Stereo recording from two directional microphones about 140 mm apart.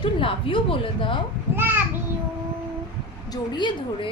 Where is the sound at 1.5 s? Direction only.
15° right (ahead or behind).